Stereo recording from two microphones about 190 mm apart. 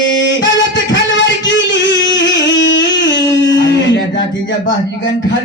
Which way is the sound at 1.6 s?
75° left (ahead or behind).